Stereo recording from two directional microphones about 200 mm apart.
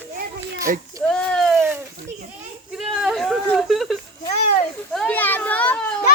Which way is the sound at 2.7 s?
Centre (ahead or behind).